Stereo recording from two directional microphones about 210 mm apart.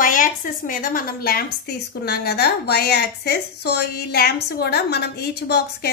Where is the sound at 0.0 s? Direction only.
40° left (ahead or behind).